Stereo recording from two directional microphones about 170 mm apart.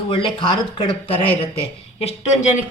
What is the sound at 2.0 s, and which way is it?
Speech, 40° left (ahead or behind).